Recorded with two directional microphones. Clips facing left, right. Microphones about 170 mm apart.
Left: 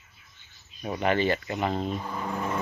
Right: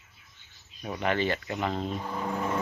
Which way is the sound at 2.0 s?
5° right (ahead or behind).